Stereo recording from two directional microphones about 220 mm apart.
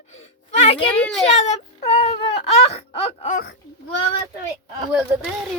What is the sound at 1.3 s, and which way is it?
Wail, 30° left (ahead or behind).